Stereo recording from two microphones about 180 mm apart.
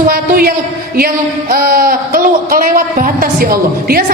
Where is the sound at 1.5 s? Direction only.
55° right (ahead or behind).